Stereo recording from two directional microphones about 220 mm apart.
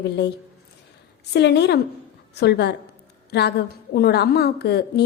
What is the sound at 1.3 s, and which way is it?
A woman's voice, 50° left (ahead or behind).